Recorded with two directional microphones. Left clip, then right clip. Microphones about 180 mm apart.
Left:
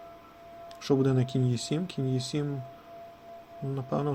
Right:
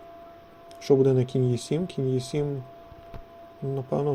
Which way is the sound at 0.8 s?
5° right (ahead or behind).